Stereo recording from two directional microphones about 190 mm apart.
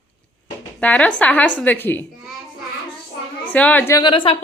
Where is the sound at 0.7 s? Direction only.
5° left (ahead or behind).